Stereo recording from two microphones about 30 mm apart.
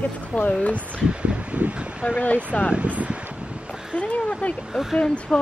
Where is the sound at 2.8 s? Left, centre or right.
Right.